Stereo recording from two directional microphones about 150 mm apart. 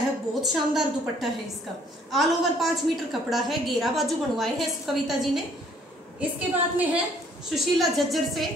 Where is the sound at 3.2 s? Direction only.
Centre (ahead or behind).